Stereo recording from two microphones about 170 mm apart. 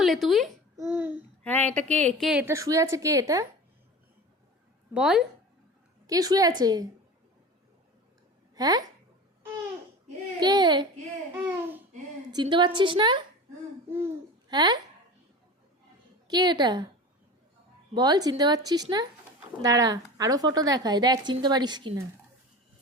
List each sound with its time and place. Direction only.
0.0 s a child's voice: centre (ahead or behind)
0.8 s babbling: 10° right (ahead or behind)
1.5 s a woman's voice: 10° left (ahead or behind)
2.4 s a woman's voice: 15° right (ahead or behind)
4.9 s speech: centre (ahead or behind)
6.1 s a woman's voice: 20° right (ahead or behind)
8.5 s speech: 20° right (ahead or behind)
10.4 s a woman's voice: 25° right (ahead or behind)
12.3 s a woman's voice: 25° right (ahead or behind)
14.5 s a woman's voice: 25° right (ahead or behind)
16.2 s a woman's voice: 25° right (ahead or behind)
17.9 s a woman's voice: 20° right (ahead or behind)